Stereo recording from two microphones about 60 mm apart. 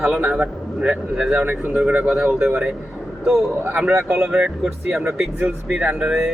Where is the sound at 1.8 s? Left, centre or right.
Centre.